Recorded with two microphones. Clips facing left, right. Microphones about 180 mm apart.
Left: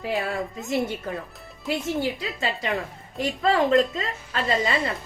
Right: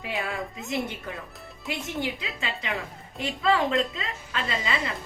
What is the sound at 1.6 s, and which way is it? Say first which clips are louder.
A woman's voice: left 5 dB; 40° left (ahead or behind).